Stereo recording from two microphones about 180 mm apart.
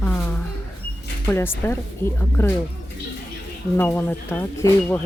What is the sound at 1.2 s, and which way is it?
Speech, 10° left (ahead or behind).